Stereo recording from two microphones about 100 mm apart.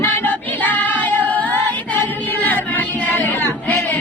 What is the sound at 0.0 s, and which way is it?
Music, 15° left (ahead or behind).